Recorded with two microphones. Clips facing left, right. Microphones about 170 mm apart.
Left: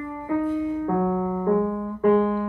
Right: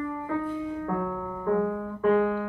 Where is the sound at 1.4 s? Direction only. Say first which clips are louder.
Left 1 dB; 10° left (ahead or behind).